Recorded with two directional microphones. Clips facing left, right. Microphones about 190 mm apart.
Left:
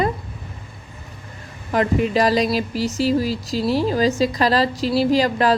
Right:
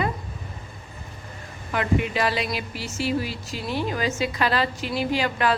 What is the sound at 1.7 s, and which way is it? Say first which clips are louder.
Speech: left 6 dB; 35° left (ahead or behind).